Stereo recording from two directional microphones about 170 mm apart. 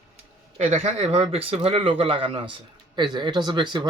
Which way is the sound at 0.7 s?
40° right (ahead or behind).